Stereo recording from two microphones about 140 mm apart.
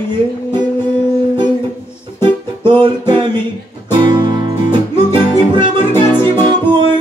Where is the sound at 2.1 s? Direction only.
35° right (ahead or behind).